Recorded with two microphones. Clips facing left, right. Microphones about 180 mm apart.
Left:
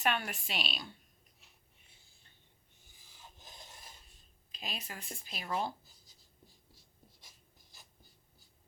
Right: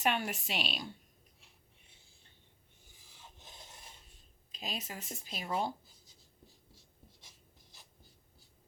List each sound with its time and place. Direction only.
0.0 s a woman's voice: 20° right (ahead or behind)
3.3 s filing: 25° right (ahead or behind)
4.7 s a woman's voice: 20° right (ahead or behind)